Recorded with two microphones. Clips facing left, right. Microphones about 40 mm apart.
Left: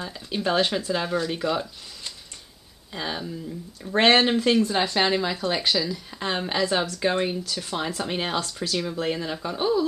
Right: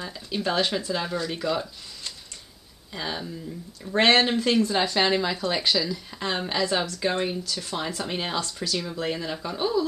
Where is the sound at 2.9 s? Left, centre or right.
Centre.